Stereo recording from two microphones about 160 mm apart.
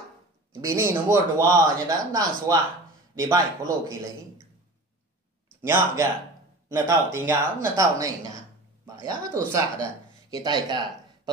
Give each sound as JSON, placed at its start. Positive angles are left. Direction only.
{"t": 0.6, "sound": "speech", "side_deg": -15}
{"t": 6.7, "sound": "speech", "side_deg": -20}